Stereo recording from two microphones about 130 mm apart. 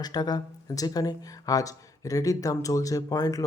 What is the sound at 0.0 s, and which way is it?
Speech, 30° left (ahead or behind).